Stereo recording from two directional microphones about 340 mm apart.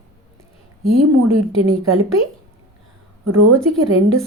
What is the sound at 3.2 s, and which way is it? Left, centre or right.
Speech, right.